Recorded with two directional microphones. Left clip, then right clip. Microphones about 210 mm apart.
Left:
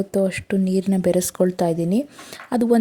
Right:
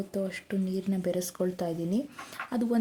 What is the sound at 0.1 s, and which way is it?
Speech, 35° left (ahead or behind).